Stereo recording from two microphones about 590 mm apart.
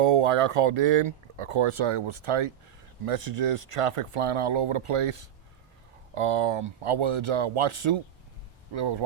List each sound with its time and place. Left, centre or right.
0.0 s speech: right
3.1 s speech: right
6.1 s speech: right